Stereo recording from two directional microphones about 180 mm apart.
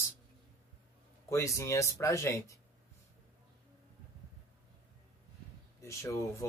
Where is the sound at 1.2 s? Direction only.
15° left (ahead or behind).